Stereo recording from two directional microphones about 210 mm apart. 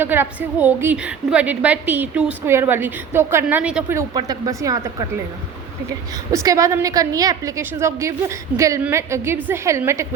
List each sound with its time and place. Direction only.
0.0 s a woman's voice: 10° right (ahead or behind)
6.3 s a woman's voice: 15° right (ahead or behind)